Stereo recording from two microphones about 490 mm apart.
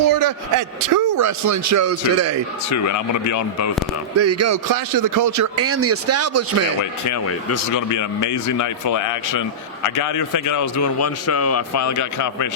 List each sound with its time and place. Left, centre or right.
0.0 s a man's voice: right
2.6 s a man's voice: left
4.2 s a man's voice: right
7.0 s a man's voice: left